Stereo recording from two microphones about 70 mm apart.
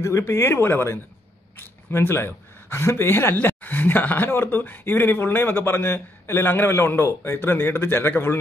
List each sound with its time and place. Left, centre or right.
0.2 s a man's voice: left